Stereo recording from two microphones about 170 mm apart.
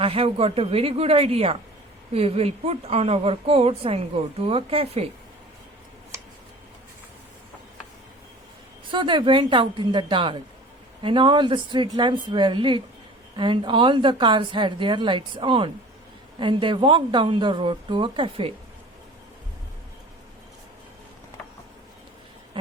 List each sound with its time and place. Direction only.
0.0 s a woman's voice: 35° right (ahead or behind)
8.9 s a woman's voice: 30° right (ahead or behind)